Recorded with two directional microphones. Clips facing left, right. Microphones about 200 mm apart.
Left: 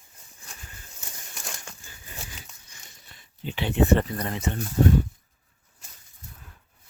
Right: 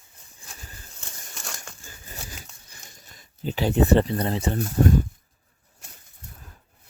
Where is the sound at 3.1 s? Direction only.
40° right (ahead or behind).